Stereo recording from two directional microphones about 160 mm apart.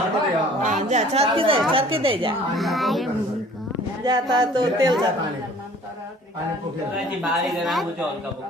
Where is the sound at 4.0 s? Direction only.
25° right (ahead or behind).